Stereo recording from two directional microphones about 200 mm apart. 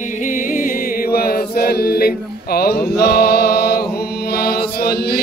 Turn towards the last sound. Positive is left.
turn(degrees=50)  # may be behind; listen again after turning